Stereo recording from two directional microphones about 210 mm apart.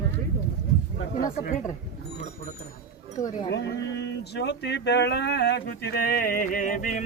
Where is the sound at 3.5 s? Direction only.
55° left (ahead or behind).